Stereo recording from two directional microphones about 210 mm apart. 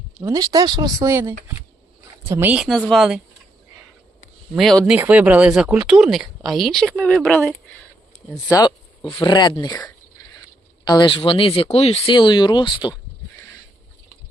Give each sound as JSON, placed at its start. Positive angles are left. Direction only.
{"t": 0.2, "sound": "speech", "side_deg": -15}
{"t": 4.5, "sound": "speech", "side_deg": 0}
{"t": 8.4, "sound": "speech", "side_deg": 20}